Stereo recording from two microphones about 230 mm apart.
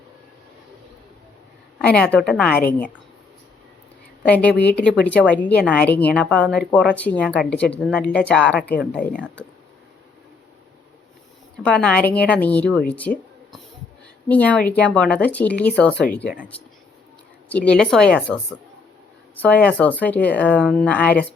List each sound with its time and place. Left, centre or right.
1.8 s speech: centre
4.2 s speech: centre
11.6 s speech: centre
13.0 s a sound: centre
14.3 s speech: centre
17.5 s speech: centre
19.4 s speech: centre